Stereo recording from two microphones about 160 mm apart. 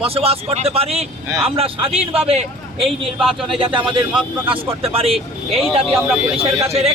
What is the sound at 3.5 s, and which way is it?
Speech, 35° right (ahead or behind).